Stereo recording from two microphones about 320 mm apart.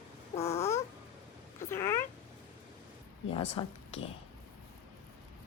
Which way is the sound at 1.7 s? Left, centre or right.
Centre.